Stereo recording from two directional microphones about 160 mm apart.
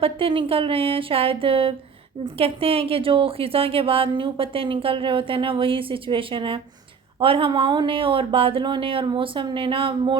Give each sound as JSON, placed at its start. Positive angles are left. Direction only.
{"t": 0.0, "sound": "a woman's voice", "side_deg": -35}